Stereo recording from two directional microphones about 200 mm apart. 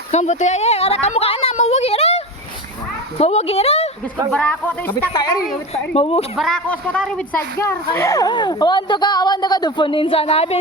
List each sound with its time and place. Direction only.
0.1 s a woman's voice: 35° left (ahead or behind)
4.3 s speech: 5° left (ahead or behind)
5.9 s a woman's voice: 30° left (ahead or behind)
6.3 s speech: centre (ahead or behind); by 10.6 s 30° left (ahead or behind)